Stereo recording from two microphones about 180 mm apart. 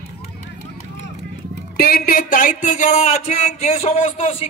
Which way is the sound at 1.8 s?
55° left (ahead or behind).